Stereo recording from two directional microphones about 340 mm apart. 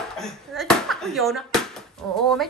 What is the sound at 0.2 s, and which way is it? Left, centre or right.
Bouncing, centre.